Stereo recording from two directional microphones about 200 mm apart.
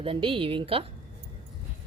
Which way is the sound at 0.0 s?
25° right (ahead or behind).